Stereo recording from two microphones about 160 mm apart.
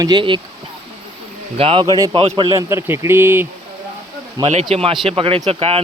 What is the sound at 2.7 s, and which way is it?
Speech, 15° right (ahead or behind).